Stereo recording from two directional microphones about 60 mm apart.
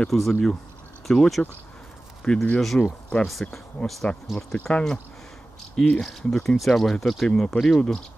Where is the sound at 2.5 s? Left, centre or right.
Centre.